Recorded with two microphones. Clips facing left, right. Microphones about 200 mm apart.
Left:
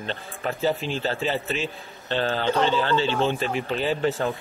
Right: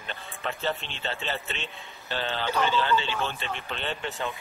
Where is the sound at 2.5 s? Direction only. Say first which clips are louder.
Left 2 dB; 30° left (ahead or behind).